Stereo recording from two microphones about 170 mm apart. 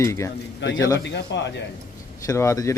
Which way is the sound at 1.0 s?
90° left.